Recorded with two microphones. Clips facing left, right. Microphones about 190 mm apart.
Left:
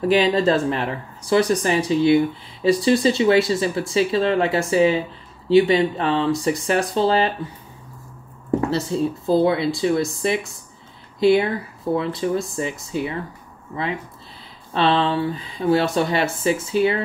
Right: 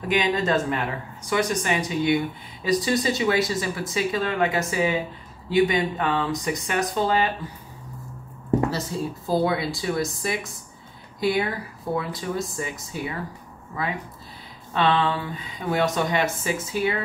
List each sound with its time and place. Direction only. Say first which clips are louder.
0.1 s speech: left 4 dB; 30° left (ahead or behind)
8.6 s speech: left 6 dB; 25° left (ahead or behind)
14.7 s speech: left 3 dB; 30° left (ahead or behind)